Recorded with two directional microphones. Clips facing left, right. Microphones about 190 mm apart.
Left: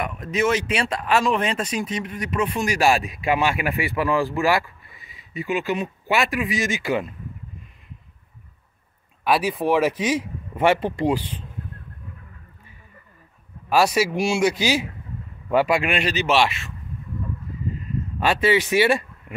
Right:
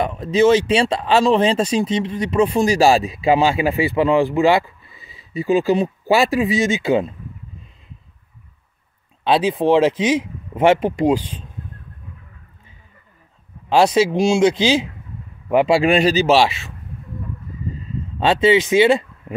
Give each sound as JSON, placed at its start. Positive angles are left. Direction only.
{"t": 0.0, "sound": "speech", "side_deg": -30}
{"t": 9.2, "sound": "speech", "side_deg": -25}
{"t": 13.7, "sound": "speech", "side_deg": -25}
{"t": 15.8, "sound": "speech", "side_deg": -35}
{"t": 18.2, "sound": "speech", "side_deg": -20}
{"t": 19.3, "sound": "a sound", "side_deg": -30}